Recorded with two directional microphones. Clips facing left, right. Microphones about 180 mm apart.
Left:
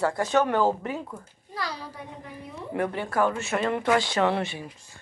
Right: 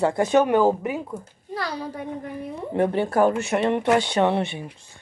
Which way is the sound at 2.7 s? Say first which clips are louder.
Right 6 dB; 30° right (ahead or behind).